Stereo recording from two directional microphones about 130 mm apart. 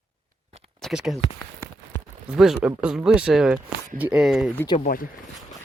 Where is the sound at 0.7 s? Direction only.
Centre (ahead or behind).